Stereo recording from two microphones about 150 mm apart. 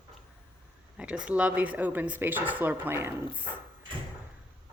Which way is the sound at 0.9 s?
5° right (ahead or behind).